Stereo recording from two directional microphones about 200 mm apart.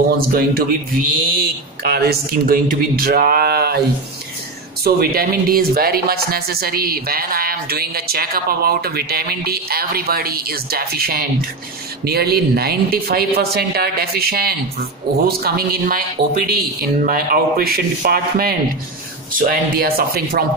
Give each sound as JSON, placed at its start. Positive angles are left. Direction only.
{"t": 0.3, "sound": "speech", "side_deg": -45}
{"t": 1.8, "sound": "speech", "side_deg": -50}
{"t": 4.8, "sound": "speech", "side_deg": -50}